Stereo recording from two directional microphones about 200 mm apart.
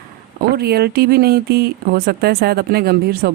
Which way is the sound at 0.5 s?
50° right (ahead or behind).